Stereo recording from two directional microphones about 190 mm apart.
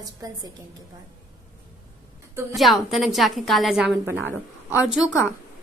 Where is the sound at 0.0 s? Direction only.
20° right (ahead or behind).